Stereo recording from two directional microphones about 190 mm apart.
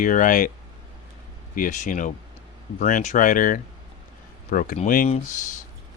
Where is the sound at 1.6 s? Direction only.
40° left (ahead or behind).